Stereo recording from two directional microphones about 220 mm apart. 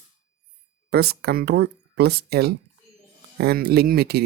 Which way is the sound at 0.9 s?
45° right (ahead or behind).